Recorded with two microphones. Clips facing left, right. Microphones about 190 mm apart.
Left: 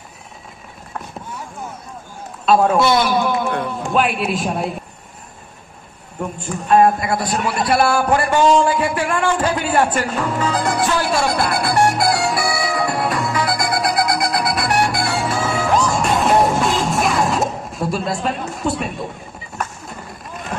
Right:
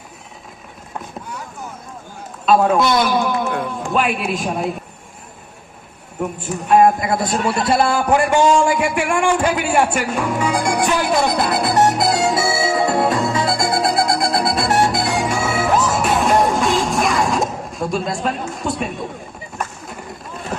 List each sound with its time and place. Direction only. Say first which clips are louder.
2.4 s a man's voice: even; centre (ahead or behind)
6.4 s a man's voice: even; 10° right (ahead or behind)
7.0 s a man's voice: right 1 dB; 20° right (ahead or behind)
7.6 s a sound: left 3 dB; 20° right (ahead or behind); by 18.3 s centre (ahead or behind)
18.6 s speech: left 3 dB; centre (ahead or behind)